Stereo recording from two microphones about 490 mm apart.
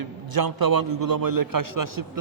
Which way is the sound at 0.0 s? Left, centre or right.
Right.